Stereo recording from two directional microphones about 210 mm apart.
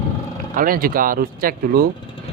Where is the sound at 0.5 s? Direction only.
40° right (ahead or behind).